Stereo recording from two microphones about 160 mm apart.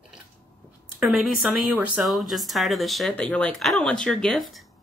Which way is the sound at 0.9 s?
Centre (ahead or behind).